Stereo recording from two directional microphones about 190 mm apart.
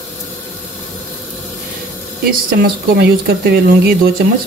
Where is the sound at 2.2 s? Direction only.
55° right (ahead or behind).